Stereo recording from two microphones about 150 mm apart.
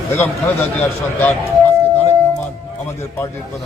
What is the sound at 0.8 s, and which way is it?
Speech, 10° left (ahead or behind).